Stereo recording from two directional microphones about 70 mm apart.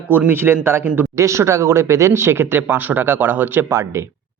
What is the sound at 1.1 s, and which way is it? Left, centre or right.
Speech, right.